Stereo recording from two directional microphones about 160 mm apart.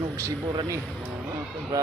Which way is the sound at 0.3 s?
25° right (ahead or behind).